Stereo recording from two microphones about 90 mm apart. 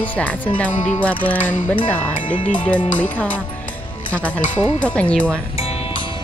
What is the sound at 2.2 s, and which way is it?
Music, 70° left (ahead or behind).